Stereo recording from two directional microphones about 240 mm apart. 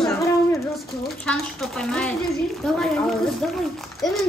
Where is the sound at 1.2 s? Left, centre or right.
Centre.